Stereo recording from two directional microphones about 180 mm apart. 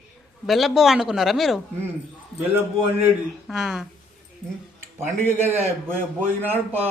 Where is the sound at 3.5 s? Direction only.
5° right (ahead or behind).